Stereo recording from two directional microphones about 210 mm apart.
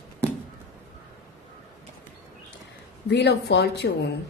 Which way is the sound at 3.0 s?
55° left (ahead or behind).